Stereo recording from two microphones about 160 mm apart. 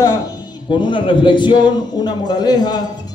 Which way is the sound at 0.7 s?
30° left (ahead or behind).